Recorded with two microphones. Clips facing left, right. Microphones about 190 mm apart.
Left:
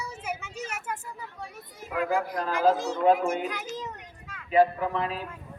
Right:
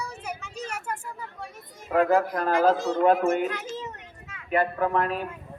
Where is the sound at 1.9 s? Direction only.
55° right (ahead or behind).